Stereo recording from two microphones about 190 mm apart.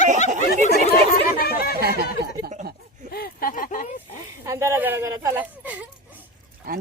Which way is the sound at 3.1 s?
50° left (ahead or behind).